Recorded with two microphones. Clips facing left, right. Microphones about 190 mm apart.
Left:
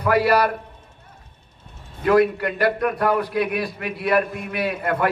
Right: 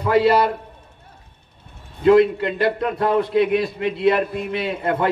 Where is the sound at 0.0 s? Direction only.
25° right (ahead or behind).